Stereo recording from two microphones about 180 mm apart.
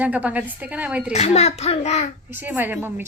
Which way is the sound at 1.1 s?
35° left (ahead or behind).